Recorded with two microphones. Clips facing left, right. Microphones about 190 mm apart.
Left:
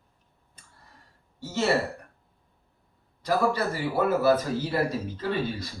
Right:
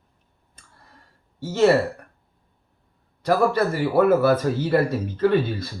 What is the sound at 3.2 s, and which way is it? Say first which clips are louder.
Speech: right 5 dB; 65° right (ahead or behind).